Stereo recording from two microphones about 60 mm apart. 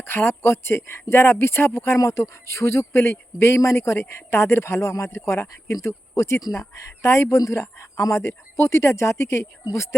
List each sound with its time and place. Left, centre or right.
0.0 s speech: left